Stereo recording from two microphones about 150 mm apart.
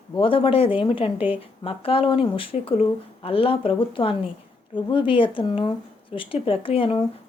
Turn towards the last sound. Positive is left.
turn(degrees=35)  # may be behind; listen again after turning